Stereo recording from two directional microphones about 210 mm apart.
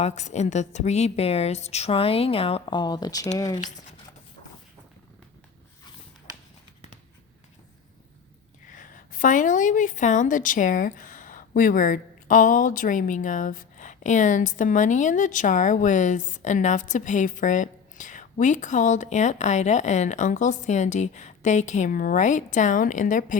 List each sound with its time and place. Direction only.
0.0 s a woman's voice: 30° left (ahead or behind); by 3.6 s 15° left (ahead or behind)
8.7 s a woman's voice: 40° left (ahead or behind)